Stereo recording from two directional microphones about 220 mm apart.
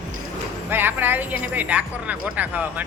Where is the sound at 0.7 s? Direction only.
10° right (ahead or behind).